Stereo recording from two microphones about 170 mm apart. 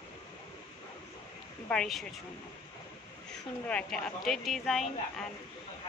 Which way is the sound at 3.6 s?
5° left (ahead or behind).